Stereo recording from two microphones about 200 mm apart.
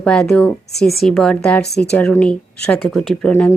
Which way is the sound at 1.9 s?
5° left (ahead or behind).